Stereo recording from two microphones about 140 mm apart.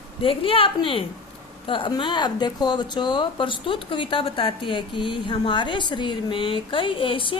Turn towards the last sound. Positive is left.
turn(degrees=40)  # may be behind; listen again after turning